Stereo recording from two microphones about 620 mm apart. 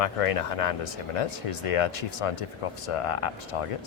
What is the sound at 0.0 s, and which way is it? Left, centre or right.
Speech, left.